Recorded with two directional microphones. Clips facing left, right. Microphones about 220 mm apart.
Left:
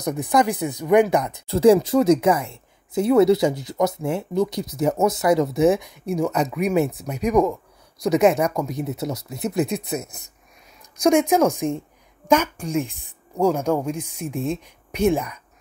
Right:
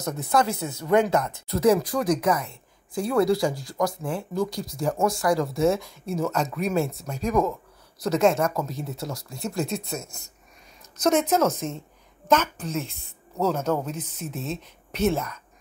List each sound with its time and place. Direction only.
0.0 s speech: 15° left (ahead or behind)
1.5 s speech: 30° left (ahead or behind); by 15.3 s 15° left (ahead or behind)